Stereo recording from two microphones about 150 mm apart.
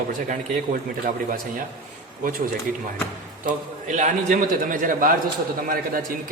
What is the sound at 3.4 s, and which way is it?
A man's voice, 55° right (ahead or behind).